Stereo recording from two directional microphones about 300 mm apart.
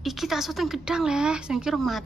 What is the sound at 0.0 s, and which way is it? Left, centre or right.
A woman's voice, centre.